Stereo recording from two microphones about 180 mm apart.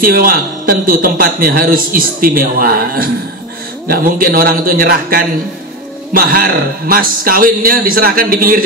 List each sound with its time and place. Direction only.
0.0 s a man's voice: 55° right (ahead or behind)